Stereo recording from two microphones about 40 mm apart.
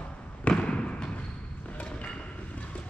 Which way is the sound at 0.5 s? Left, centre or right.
Left.